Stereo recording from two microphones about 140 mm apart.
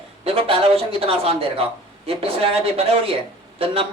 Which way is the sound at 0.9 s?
45° right (ahead or behind).